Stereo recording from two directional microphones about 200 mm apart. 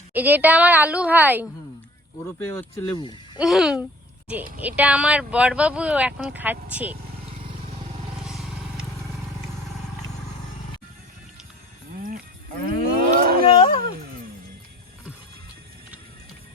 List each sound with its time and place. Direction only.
0.1 s speech: 10° right (ahead or behind)
2.2 s speech: 15° left (ahead or behind)
3.4 s speech: centre (ahead or behind)
8.2 s vehicle: centre (ahead or behind)
11.9 s cattle: 45° right (ahead or behind)